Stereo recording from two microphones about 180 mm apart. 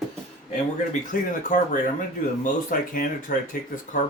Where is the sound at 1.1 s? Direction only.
45° left (ahead or behind).